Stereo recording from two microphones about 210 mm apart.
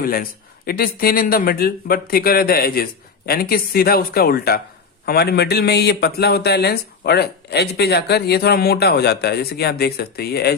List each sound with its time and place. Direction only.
0.0 s a man's voice: 45° left (ahead or behind)